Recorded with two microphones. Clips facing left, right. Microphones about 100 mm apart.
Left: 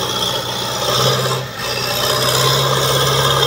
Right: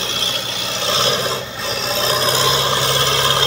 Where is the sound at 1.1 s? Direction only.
5° left (ahead or behind).